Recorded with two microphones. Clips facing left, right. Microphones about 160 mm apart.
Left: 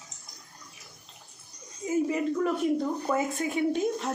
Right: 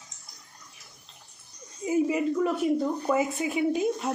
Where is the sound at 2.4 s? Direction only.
5° right (ahead or behind).